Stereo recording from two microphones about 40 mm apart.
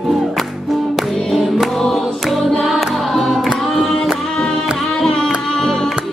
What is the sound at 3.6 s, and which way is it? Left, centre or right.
Singing, centre.